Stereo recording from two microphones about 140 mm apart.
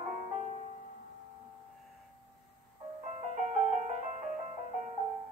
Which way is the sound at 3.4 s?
60° right (ahead or behind).